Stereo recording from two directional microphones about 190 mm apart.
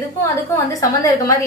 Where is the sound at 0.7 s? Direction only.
15° left (ahead or behind).